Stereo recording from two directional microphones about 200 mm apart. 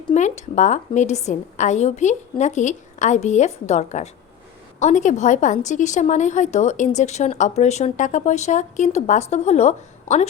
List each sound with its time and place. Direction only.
0.1 s a woman's voice: 35° left (ahead or behind)